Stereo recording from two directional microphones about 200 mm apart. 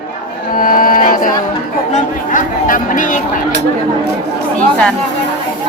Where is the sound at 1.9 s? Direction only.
40° left (ahead or behind).